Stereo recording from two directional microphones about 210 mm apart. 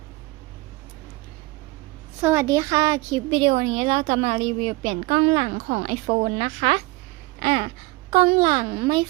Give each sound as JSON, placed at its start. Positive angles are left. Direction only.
{"t": 2.2, "sound": "a woman's voice", "side_deg": -15}
{"t": 7.3, "sound": "a sound", "side_deg": -25}
{"t": 8.1, "sound": "a woman's voice", "side_deg": -25}